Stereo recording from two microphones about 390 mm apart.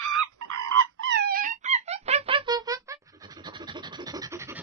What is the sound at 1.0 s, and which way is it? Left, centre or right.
Wail, right.